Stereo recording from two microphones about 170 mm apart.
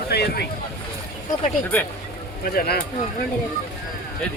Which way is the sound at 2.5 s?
65° left (ahead or behind).